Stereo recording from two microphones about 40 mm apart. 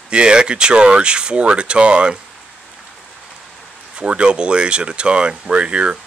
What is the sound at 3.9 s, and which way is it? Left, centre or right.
Speech, right.